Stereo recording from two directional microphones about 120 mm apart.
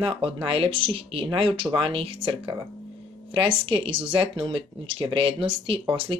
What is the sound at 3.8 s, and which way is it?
Speech, 45° right (ahead or behind).